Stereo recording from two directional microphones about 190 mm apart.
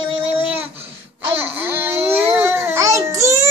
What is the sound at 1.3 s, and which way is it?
Baby cry, 10° right (ahead or behind).